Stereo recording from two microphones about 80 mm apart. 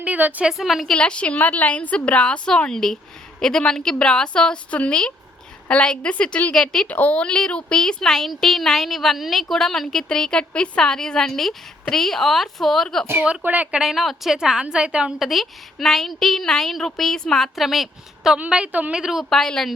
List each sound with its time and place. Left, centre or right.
0.0 s a woman's voice: centre
0.4 s speech: centre
0.9 s a woman's voice: centre
13.4 s a woman's voice: right
15.2 s speech: centre
18.3 s a woman's voice: centre
19.3 s speech: centre